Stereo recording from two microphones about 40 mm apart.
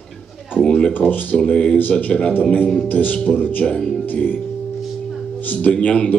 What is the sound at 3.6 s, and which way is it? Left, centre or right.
Speech, centre.